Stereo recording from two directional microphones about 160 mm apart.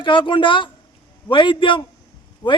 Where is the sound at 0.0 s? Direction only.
30° left (ahead or behind).